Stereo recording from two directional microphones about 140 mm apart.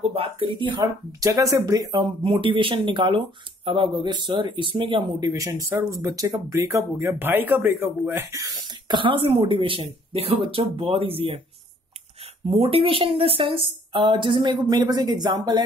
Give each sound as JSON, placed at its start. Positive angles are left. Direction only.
{"t": 0.1, "sound": "speech", "side_deg": -40}
{"t": 1.2, "sound": "speech", "side_deg": -20}
{"t": 5.3, "sound": "speech", "side_deg": -20}
{"t": 12.4, "sound": "speech", "side_deg": -40}